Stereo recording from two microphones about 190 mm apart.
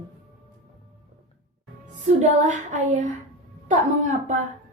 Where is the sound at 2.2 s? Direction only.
40° right (ahead or behind).